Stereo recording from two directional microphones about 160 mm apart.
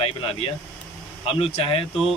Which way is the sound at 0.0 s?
35° left (ahead or behind).